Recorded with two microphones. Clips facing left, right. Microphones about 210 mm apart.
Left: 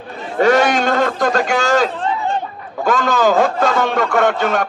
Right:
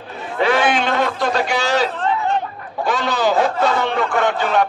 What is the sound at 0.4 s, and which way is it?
A man's voice, 45° left (ahead or behind).